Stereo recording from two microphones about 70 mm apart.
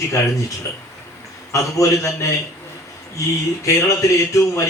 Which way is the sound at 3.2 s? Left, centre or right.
Left.